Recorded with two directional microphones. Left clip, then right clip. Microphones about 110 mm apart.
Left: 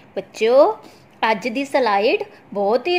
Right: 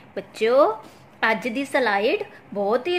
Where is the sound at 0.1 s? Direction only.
25° left (ahead or behind).